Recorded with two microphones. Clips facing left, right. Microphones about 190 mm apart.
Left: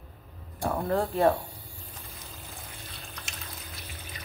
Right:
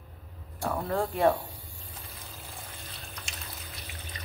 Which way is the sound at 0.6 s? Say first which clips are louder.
Left 2 dB; 10° left (ahead or behind).